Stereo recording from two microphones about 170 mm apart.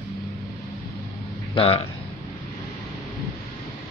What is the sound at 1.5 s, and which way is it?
Speech, 35° left (ahead or behind).